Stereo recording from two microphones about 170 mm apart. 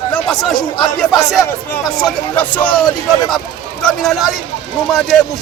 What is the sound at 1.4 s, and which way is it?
Speech, 20° left (ahead or behind).